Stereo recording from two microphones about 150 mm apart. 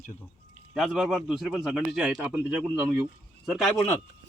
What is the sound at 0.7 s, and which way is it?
Speech, 5° right (ahead or behind).